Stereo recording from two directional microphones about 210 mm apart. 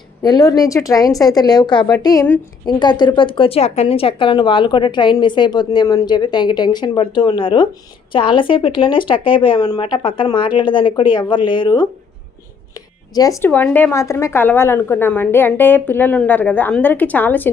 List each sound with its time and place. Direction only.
0.2 s speech: 20° left (ahead or behind)